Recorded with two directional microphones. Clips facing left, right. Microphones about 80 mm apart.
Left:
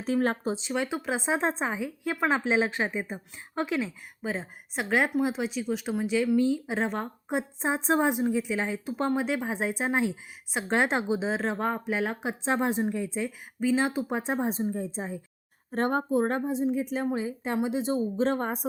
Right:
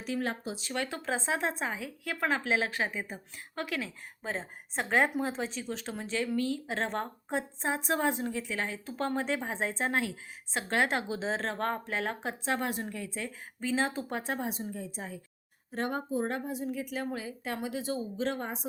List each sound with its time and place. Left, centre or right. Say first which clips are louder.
0.0 s speech: left 7 dB; left
0.7 s a woman's voice: left 2 dB; centre
1.4 s a woman's voice: left 5 dB; left
4.2 s a woman's voice: left 4 dB; centre
11.3 s a woman's voice: left 3 dB; centre
12.5 s a woman's voice: left 7 dB; left
14.2 s a woman's voice: left 6 dB; left
15.7 s speech: left 7 dB; left
16.4 s a woman's voice: left 8 dB; left
18.2 s speech: left 6 dB; left